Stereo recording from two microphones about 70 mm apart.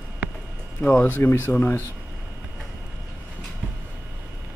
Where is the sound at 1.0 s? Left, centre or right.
Left.